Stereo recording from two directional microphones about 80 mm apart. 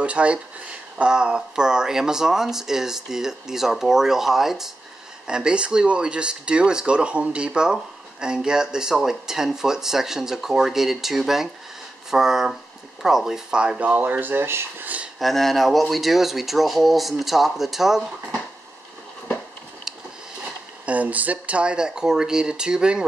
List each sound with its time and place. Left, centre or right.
0.0 s speech: centre
15.1 s speech: centre
20.8 s speech: centre